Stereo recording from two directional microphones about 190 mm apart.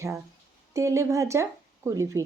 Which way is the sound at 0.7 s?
15° right (ahead or behind).